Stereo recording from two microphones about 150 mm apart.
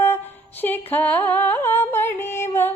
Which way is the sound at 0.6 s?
10° left (ahead or behind).